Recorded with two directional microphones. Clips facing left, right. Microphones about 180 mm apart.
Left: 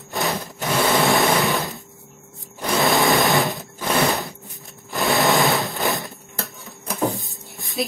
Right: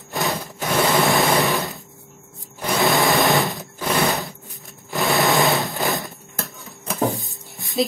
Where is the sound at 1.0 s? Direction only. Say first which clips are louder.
Even; centre (ahead or behind).